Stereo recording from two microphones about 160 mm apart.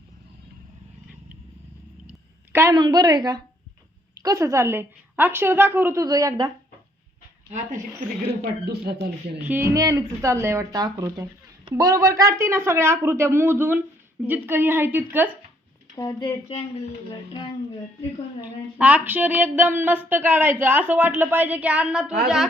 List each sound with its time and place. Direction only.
2.0 s a sound: 15° right (ahead or behind)
2.7 s speech: 25° right (ahead or behind)
7.5 s speech: 55° right (ahead or behind)
8.6 s speech: 90° right
9.4 s speech: 10° right (ahead or behind)
16.0 s speech: 30° left (ahead or behind)
18.4 s speech: 10° right (ahead or behind)